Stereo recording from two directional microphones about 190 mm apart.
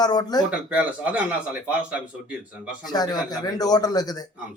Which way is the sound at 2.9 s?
20° left (ahead or behind).